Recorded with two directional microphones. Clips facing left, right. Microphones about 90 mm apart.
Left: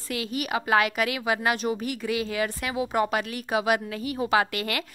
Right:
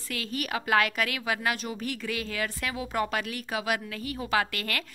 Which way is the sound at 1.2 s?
20° left (ahead or behind).